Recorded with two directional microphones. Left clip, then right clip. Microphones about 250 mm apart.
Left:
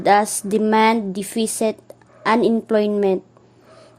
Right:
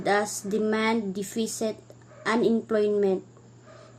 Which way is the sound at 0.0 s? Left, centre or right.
Left.